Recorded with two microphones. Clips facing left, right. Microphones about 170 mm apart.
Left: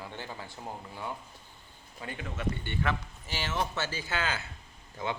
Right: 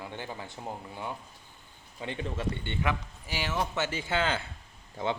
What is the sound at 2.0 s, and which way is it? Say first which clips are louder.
A man's voice: right 2 dB; 25° right (ahead or behind).